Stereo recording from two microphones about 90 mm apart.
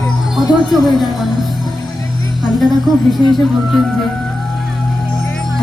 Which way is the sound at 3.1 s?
Centre (ahead or behind).